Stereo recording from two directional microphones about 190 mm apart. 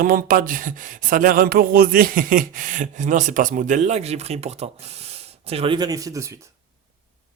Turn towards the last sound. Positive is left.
turn(degrees=-15)  # may be behind; listen again after turning